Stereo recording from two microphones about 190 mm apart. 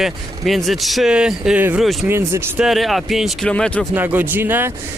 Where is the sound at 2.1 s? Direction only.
15° right (ahead or behind).